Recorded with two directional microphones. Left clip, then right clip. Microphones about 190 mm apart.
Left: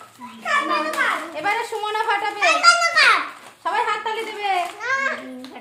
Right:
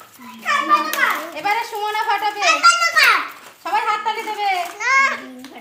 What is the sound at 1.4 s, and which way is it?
Speech, 20° left (ahead or behind).